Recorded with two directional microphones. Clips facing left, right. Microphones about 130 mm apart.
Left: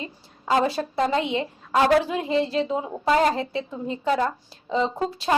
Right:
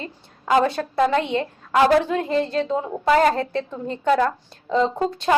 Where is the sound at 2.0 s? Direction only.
5° left (ahead or behind).